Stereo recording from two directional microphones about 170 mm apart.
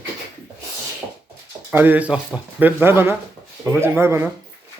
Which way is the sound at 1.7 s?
10° right (ahead or behind).